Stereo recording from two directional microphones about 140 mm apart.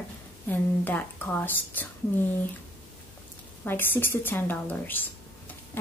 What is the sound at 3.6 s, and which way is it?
Speech, 15° left (ahead or behind).